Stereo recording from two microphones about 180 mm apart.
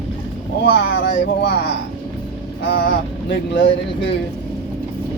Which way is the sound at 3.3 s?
80° left.